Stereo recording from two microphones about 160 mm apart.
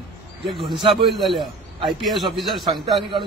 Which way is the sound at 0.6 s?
30° right (ahead or behind).